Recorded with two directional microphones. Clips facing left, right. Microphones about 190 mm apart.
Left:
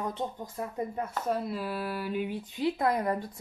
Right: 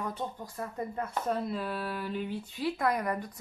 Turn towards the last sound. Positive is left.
turn(degrees=25)  # may be behind; listen again after turning